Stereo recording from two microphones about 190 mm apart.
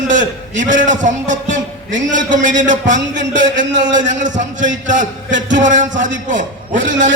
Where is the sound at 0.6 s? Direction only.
40° right (ahead or behind).